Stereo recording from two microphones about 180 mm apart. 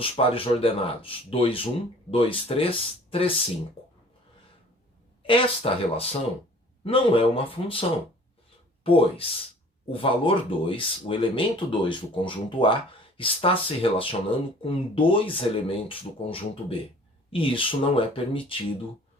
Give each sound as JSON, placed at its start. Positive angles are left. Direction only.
{"t": 0.0, "sound": "speech", "side_deg": 30}
{"t": 5.2, "sound": "speech", "side_deg": 30}